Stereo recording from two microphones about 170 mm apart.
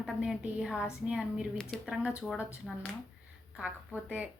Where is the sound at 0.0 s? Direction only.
5° right (ahead or behind).